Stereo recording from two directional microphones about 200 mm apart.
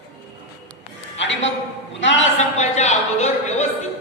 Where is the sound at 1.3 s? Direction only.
70° left (ahead or behind).